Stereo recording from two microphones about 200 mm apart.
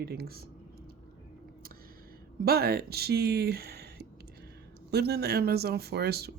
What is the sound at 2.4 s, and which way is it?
Speech, 50° right (ahead or behind).